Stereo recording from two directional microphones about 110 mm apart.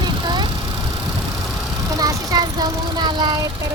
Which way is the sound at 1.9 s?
35° right (ahead or behind).